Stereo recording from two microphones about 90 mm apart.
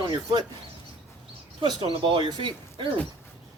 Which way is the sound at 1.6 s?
50° right (ahead or behind).